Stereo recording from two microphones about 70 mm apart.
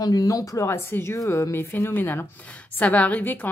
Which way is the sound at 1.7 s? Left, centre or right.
Left.